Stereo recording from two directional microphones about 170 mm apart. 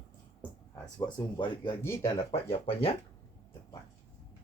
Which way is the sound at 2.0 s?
35° left (ahead or behind).